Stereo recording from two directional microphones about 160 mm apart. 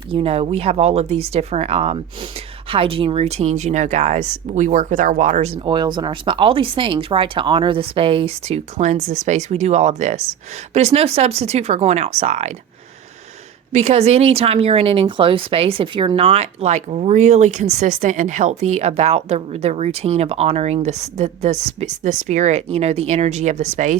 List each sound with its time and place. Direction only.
0.1 s speech: 35° right (ahead or behind)
5.6 s speech: 30° right (ahead or behind); by 12.5 s 45° right (ahead or behind)
13.7 s speech: 40° right (ahead or behind)